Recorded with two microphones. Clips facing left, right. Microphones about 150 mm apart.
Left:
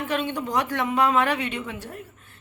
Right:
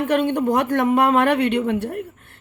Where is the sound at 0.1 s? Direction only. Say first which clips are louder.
Right 7 dB; 55° right (ahead or behind).